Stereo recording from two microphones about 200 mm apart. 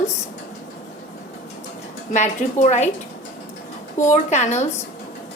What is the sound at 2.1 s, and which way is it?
Speech, 35° left (ahead or behind).